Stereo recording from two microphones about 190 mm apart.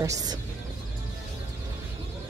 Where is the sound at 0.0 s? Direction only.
15° right (ahead or behind).